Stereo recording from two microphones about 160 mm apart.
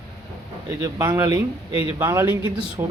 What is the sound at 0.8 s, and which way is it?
Speech, 20° right (ahead or behind).